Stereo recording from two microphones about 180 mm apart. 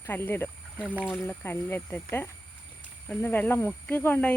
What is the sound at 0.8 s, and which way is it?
Speech, 5° right (ahead or behind).